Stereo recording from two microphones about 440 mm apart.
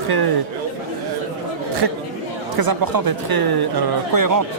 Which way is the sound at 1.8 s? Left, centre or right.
Right.